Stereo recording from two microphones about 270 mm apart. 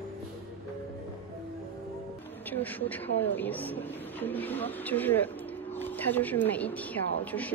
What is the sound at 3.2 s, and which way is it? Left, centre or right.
A woman's voice, centre.